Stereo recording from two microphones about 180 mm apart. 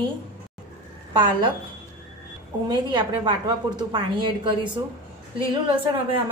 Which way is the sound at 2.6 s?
25° right (ahead or behind).